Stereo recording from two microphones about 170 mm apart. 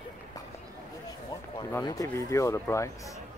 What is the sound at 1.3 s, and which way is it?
Speech, 20° left (ahead or behind).